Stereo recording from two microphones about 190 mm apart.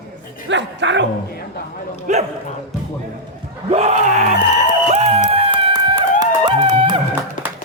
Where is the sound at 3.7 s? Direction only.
35° right (ahead or behind).